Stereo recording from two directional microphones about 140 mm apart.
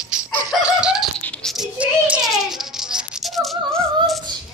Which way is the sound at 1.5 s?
5° right (ahead or behind).